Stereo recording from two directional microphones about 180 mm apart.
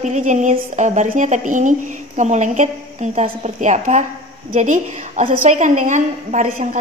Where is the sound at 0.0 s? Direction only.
40° right (ahead or behind).